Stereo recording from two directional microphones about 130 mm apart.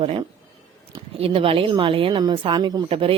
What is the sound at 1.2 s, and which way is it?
Speech, 45° right (ahead or behind).